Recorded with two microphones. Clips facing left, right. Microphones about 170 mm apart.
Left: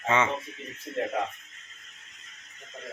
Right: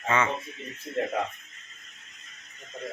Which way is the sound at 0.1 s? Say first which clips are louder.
Left 1 dB; 25° left (ahead or behind).